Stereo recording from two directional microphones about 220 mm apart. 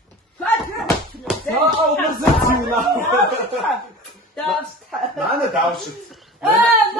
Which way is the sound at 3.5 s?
Centre (ahead or behind).